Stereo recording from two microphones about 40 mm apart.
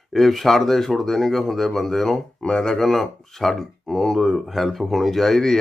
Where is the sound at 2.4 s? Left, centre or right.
Centre.